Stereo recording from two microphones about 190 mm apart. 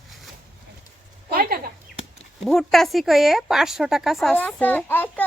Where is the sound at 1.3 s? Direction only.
55° right (ahead or behind).